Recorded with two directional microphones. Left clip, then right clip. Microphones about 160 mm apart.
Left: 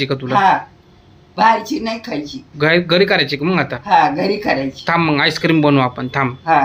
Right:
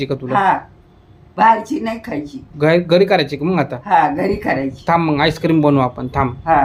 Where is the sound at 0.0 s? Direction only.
5° right (ahead or behind).